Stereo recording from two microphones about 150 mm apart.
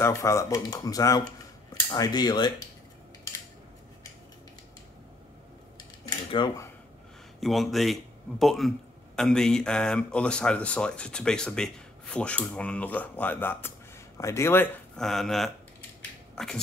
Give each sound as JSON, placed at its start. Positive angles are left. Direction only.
{"t": 0.0, "sound": "speech", "side_deg": 20}
{"t": 6.0, "sound": "dishes", "side_deg": 30}
{"t": 7.3, "sound": "speech", "side_deg": 0}
{"t": 15.0, "sound": "speech", "side_deg": 0}